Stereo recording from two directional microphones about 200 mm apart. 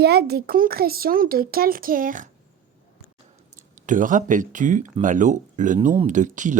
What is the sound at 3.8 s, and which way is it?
Speech, 40° right (ahead or behind).